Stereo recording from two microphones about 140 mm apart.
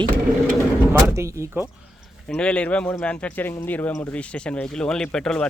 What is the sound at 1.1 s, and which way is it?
Speech, 20° right (ahead or behind).